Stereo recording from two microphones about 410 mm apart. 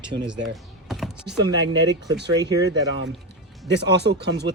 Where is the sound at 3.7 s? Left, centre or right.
Right.